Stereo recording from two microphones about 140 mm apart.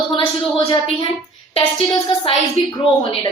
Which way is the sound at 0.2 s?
40° left (ahead or behind).